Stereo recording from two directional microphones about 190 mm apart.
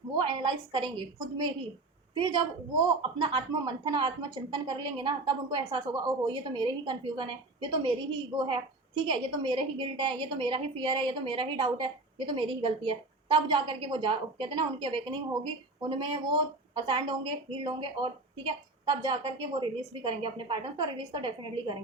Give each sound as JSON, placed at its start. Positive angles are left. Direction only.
{"t": 0.2, "sound": "a woman's voice", "side_deg": -25}
{"t": 9.0, "sound": "a woman's voice", "side_deg": -25}